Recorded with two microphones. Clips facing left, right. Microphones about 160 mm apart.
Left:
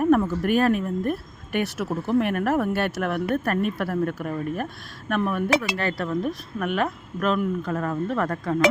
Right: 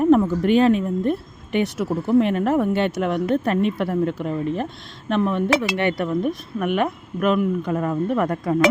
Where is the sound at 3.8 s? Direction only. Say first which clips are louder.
Right 3 dB; 20° right (ahead or behind).